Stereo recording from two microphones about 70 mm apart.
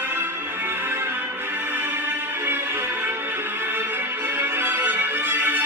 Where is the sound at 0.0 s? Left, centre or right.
Right.